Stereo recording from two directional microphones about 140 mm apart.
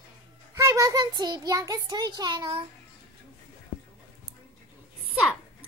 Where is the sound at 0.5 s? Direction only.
25° right (ahead or behind).